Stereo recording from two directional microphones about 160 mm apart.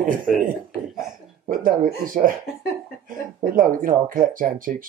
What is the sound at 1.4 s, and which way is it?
Speech, 60° right (ahead or behind).